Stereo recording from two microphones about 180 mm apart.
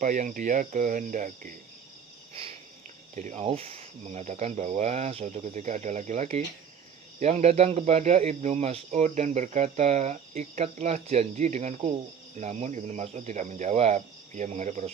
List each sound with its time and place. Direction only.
0.0 s speech: 45° right (ahead or behind)
3.2 s speech: 40° right (ahead or behind)